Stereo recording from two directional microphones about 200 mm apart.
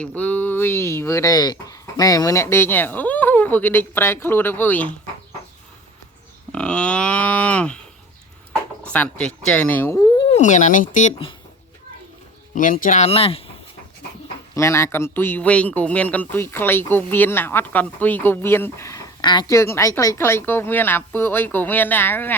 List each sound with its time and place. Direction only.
0.0 s a man's voice: 5° left (ahead or behind)
6.5 s speech: 5° left (ahead or behind)
8.8 s a man's voice: 5° left (ahead or behind)
10.2 s speech: 30° left (ahead or behind)
12.5 s speech: 40° left (ahead or behind)
14.5 s a man's voice: 15° left (ahead or behind)